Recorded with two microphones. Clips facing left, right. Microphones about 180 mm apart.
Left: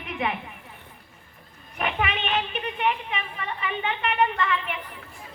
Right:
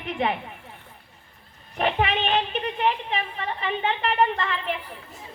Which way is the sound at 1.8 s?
30° right (ahead or behind).